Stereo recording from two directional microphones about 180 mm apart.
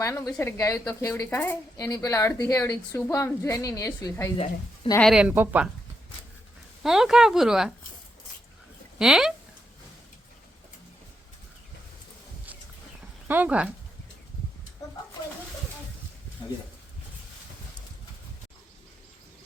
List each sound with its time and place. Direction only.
0.0 s a woman's voice: 15° left (ahead or behind)
4.4 s a woman's voice: 35° left (ahead or behind)
4.9 s speech: centre (ahead or behind)
6.8 s speech: 5° right (ahead or behind)
9.0 s speech: 5° right (ahead or behind)
13.2 s speech: 10° right (ahead or behind)